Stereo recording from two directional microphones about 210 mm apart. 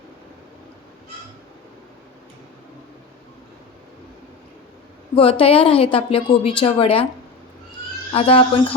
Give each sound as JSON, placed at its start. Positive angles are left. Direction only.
{"t": 5.1, "sound": "a woman's voice", "side_deg": 25}
{"t": 8.1, "sound": "a woman's voice", "side_deg": 25}